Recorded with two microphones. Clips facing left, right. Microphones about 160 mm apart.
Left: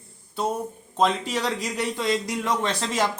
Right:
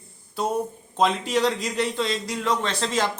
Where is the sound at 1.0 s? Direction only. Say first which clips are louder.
Right 2 dB; centre (ahead or behind).